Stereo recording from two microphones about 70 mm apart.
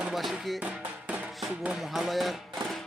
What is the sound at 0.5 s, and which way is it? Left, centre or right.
Music, centre.